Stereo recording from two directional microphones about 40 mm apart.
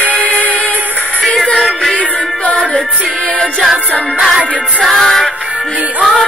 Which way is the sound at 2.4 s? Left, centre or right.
Left.